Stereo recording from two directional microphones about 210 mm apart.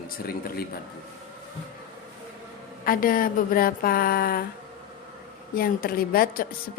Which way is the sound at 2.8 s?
40° left (ahead or behind).